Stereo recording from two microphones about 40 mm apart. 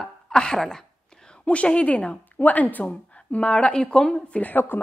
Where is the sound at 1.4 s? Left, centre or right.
Left.